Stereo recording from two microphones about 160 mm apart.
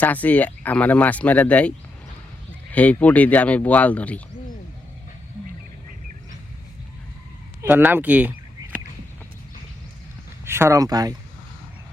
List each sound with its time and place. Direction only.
0.0 s speech: 10° left (ahead or behind)
2.7 s speech: 10° left (ahead or behind)
7.6 s speech: 10° right (ahead or behind)
10.4 s speech: 15° right (ahead or behind)